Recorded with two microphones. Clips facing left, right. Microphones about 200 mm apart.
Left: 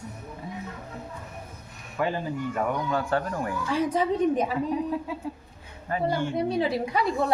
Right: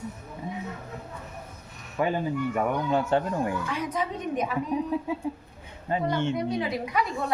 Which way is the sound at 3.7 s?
30° left (ahead or behind).